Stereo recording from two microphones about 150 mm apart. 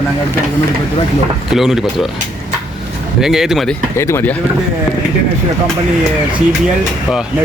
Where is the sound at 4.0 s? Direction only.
15° left (ahead or behind).